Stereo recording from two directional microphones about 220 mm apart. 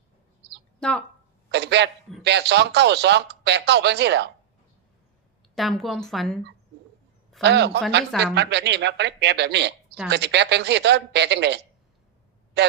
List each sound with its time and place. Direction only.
0.8 s speech: 5° left (ahead or behind)
1.5 s a sound: 50° right (ahead or behind)
2.2 s speech: 50° right (ahead or behind)
5.5 s a woman's voice: centre (ahead or behind)
7.4 s a man's voice: 50° right (ahead or behind)